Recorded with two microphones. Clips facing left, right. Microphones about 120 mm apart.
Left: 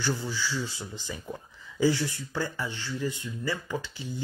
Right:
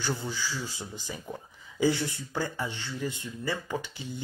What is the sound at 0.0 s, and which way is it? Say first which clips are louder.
Speech: left 2 dB; 20° right (ahead or behind).